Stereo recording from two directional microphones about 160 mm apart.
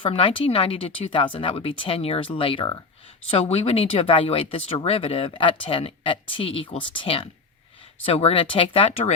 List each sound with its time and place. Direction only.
0.0 s speech: 35° left (ahead or behind)